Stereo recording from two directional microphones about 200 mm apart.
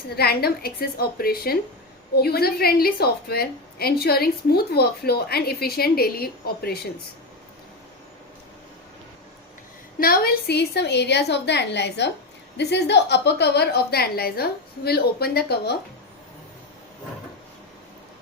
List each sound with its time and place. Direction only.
0.2 s a woman's voice: 50° left (ahead or behind)
10.0 s a woman's voice: 50° left (ahead or behind)